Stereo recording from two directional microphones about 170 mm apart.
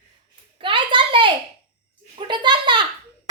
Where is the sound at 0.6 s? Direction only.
30° right (ahead or behind).